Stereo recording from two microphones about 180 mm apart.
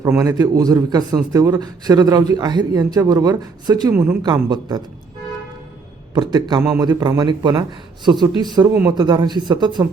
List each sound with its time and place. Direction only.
0.1 s a man's voice: 15° right (ahead or behind)
6.1 s a man's voice: 25° right (ahead or behind)